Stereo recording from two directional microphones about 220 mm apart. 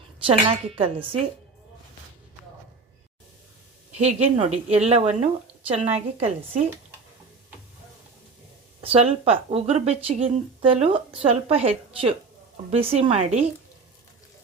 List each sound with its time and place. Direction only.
0.3 s speech: 25° right (ahead or behind)
3.9 s speech: 30° right (ahead or behind)
8.8 s speech: 25° right (ahead or behind)